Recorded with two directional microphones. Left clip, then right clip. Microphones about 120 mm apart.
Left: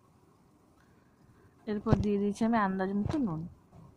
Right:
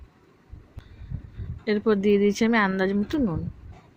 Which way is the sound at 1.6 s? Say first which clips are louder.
Right 10 dB; 30° right (ahead or behind).